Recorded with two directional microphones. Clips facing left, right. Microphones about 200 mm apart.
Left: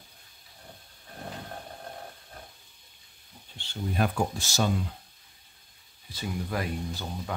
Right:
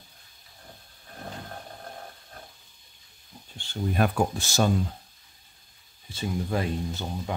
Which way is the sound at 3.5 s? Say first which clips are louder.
Right 3 dB; 55° right (ahead or behind).